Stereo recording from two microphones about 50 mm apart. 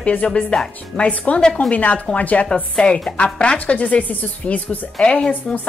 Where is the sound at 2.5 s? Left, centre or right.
Centre; by 4.8 s left.